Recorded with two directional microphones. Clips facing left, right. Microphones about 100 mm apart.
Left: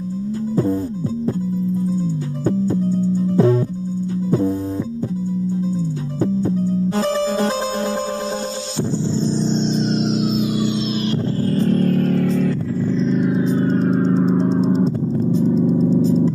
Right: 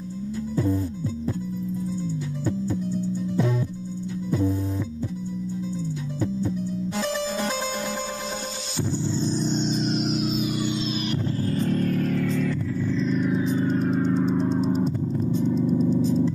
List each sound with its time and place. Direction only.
1.9 s music: 40° left (ahead or behind)
6.2 s music: 40° left (ahead or behind)
9.1 s music: 30° left (ahead or behind)
11.1 s vehicle: 35° left (ahead or behind)